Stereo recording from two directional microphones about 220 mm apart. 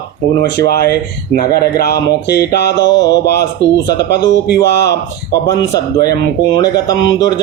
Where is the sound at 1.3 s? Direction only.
45° left (ahead or behind).